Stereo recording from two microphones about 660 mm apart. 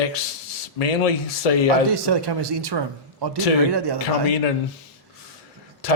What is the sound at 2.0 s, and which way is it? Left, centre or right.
Speech, right.